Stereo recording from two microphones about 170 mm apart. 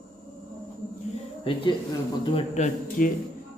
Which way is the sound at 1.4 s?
30° left (ahead or behind).